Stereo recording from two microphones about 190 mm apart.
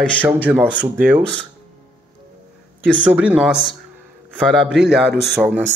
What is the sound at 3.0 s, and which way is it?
Speech, 5° right (ahead or behind).